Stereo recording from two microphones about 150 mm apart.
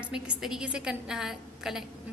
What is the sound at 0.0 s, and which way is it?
A woman's voice, 5° right (ahead or behind).